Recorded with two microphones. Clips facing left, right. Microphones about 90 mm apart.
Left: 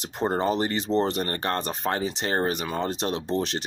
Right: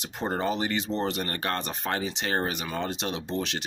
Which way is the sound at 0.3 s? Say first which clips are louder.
Left 2 dB; 35° left (ahead or behind).